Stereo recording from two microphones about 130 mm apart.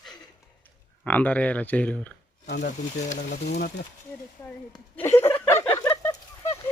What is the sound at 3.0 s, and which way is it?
Speech, 70° left (ahead or behind).